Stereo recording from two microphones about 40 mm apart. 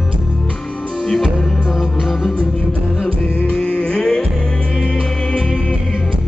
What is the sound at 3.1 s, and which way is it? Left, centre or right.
Music, left.